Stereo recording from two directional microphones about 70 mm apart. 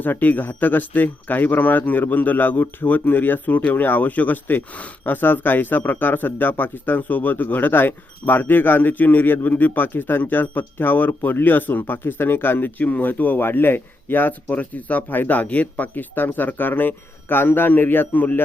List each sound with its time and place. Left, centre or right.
0.0 s speech: left